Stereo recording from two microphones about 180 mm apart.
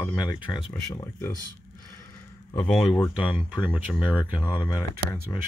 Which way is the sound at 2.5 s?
10° left (ahead or behind).